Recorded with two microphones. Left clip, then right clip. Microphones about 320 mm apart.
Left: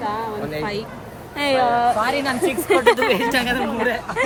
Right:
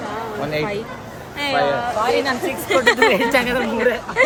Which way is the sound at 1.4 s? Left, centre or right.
Centre.